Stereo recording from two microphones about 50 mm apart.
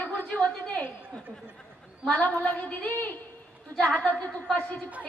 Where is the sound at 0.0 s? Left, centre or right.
Left.